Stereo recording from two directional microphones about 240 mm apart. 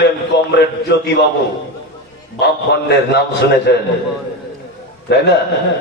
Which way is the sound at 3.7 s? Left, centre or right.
Left.